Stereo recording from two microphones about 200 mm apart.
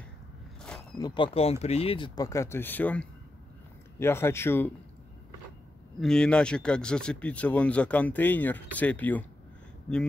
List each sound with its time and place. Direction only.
0.9 s speech: 20° left (ahead or behind)
5.9 s speech: 5° left (ahead or behind)